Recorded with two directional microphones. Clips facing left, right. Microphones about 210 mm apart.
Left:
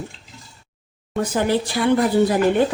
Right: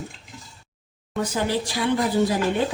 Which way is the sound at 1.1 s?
55° left (ahead or behind).